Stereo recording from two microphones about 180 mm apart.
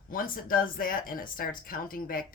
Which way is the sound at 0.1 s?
50° left (ahead or behind).